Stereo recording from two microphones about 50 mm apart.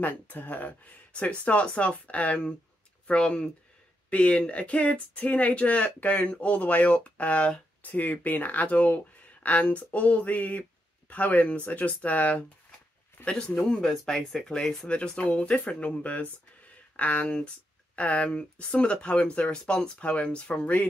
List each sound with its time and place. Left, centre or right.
0.0 s speech: left
13.2 s speech: centre
13.5 s speech: centre
14.9 s speech: left